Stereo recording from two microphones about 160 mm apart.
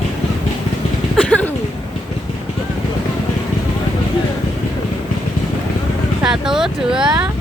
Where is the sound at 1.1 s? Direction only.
5° left (ahead or behind).